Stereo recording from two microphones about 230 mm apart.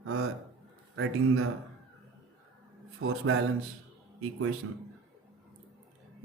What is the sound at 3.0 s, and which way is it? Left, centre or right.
Speech, right.